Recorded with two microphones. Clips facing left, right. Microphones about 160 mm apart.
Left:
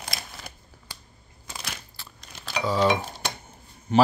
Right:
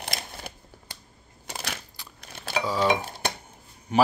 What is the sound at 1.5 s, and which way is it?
Crushing, 65° right (ahead or behind).